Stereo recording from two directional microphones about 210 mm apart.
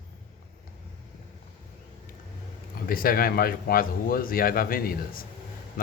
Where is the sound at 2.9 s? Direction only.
45° left (ahead or behind).